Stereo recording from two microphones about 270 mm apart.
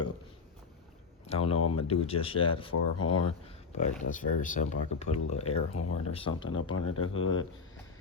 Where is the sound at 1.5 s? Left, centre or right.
Left.